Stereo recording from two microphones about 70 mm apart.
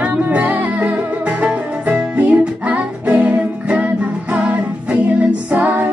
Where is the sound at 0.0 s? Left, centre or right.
Right.